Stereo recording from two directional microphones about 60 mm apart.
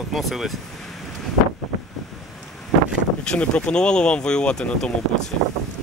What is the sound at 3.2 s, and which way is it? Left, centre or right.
Speech, centre.